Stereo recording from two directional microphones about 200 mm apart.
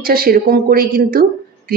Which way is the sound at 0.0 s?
45° right (ahead or behind).